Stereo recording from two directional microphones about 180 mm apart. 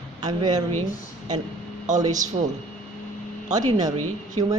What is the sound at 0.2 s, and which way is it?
Speech, 20° right (ahead or behind).